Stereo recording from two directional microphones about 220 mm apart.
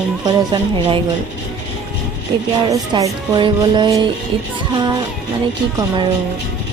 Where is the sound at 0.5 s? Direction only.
20° right (ahead or behind).